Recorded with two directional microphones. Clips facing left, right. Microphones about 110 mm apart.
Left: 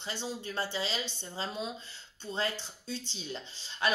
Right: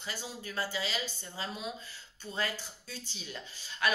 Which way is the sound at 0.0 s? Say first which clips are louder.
Left 4 dB; 25° left (ahead or behind).